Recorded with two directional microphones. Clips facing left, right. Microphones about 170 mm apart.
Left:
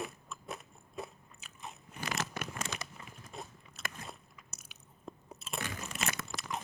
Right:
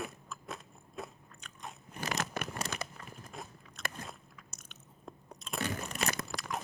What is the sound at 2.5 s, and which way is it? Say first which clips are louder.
Crumpling: right 2 dB; 35° right (ahead or behind).